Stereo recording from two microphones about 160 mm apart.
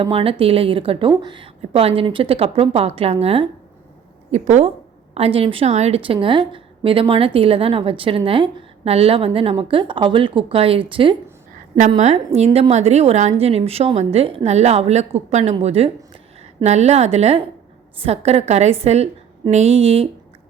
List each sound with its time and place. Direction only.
0.0 s a woman's voice: 35° right (ahead or behind)